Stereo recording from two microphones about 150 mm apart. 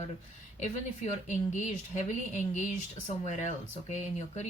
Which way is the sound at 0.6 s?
50° left (ahead or behind).